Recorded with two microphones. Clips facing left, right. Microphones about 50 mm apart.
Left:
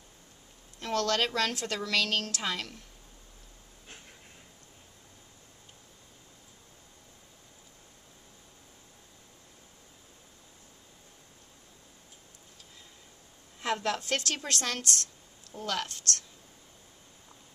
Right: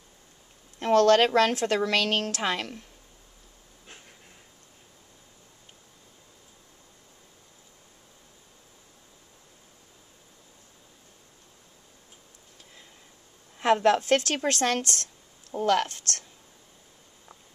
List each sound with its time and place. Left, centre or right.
0.7 s a woman's voice: right
13.6 s a woman's voice: right